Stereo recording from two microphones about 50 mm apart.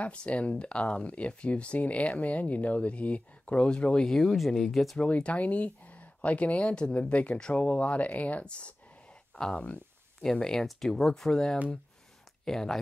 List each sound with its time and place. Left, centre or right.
0.0 s speech: left
4.1 s speech: centre
4.9 s speech: left
7.3 s speech: centre
7.6 s speech: left; by 12.7 s centre